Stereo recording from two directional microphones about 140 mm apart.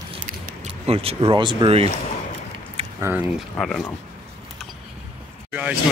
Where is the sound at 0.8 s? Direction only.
45° right (ahead or behind).